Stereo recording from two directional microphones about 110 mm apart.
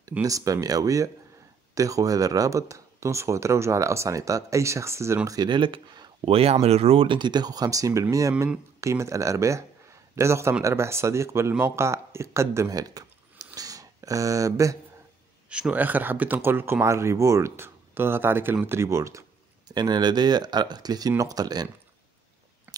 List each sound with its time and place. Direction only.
0.2 s speech: 30° right (ahead or behind)
13.5 s a sound: 30° right (ahead or behind)
15.5 s speech: 10° right (ahead or behind)
19.7 s speech: 40° right (ahead or behind)